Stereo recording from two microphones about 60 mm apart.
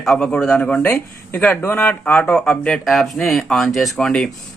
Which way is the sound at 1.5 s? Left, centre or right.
Left.